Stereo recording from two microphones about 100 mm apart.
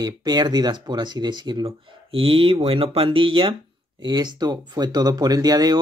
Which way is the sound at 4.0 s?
45° right (ahead or behind).